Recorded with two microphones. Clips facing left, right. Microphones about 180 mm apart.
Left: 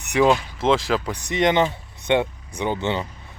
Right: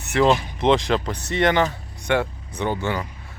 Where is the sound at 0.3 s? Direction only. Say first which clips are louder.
Even; 20° right (ahead or behind).